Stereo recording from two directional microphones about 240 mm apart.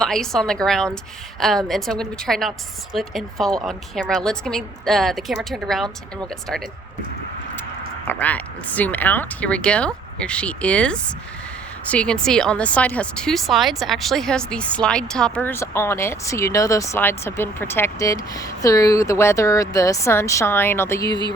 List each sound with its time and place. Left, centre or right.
0.0 s a woman's voice: centre
8.0 s a woman's voice: centre
21.1 s speech: left